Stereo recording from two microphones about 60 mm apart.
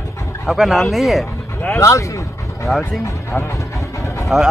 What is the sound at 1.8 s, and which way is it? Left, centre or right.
Speech, left.